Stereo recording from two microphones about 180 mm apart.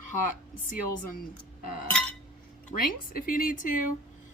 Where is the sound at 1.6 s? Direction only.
55° left (ahead or behind).